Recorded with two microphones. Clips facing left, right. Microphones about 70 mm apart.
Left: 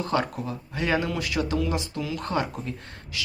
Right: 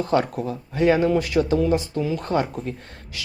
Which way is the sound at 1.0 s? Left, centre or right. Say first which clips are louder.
Right 8 dB; right.